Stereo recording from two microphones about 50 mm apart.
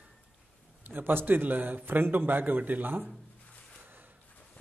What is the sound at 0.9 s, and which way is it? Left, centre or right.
A man's voice, right.